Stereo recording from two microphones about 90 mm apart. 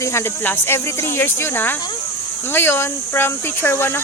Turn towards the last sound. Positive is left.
turn(degrees=25)  # may be behind; listen again after turning